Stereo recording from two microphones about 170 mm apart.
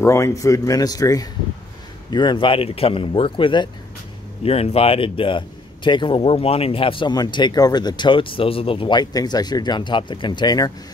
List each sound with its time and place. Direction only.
0.0 s speech: 20° left (ahead or behind)